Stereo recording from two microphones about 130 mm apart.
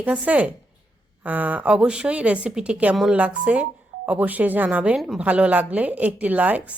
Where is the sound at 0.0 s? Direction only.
10° right (ahead or behind).